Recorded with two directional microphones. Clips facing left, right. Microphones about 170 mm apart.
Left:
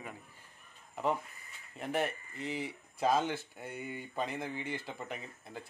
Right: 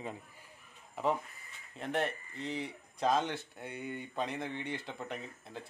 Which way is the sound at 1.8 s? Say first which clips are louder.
Even; 5° left (ahead or behind).